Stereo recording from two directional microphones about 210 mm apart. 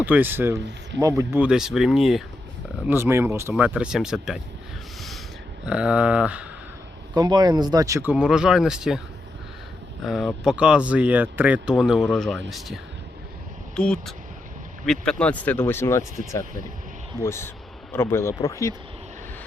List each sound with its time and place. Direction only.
0.0 s speech: 10° right (ahead or behind)
5.6 s speech: 5° right (ahead or behind)
7.1 s speech: 20° right (ahead or behind)
8.1 s speech: 5° right (ahead or behind)
10.0 s speech: centre (ahead or behind)